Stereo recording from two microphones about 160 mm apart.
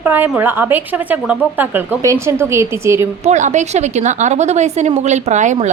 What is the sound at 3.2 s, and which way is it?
A woman's voice, 50° right (ahead or behind).